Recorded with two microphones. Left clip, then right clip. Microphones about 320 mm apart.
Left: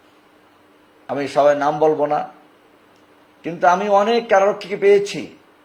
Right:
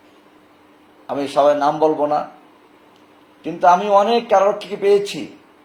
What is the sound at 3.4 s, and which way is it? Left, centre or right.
A man's voice, left.